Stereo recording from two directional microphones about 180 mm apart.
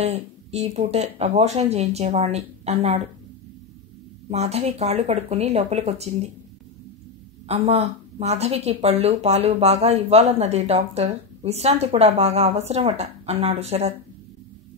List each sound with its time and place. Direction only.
0.0 s a woman's voice: 35° right (ahead or behind)
4.3 s a woman's voice: 35° right (ahead or behind)
7.4 s a woman's voice: 35° right (ahead or behind)